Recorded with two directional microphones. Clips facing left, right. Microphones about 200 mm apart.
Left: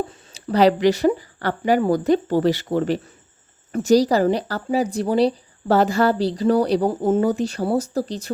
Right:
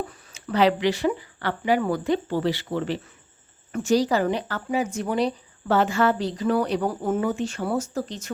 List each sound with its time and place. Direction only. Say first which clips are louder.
0.1 s speech: left 5 dB; 35° left (ahead or behind)